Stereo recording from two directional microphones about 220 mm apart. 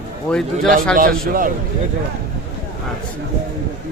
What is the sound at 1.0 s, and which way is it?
Speech, 40° right (ahead or behind).